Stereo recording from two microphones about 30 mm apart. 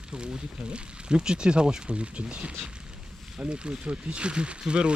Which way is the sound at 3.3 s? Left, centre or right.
Right.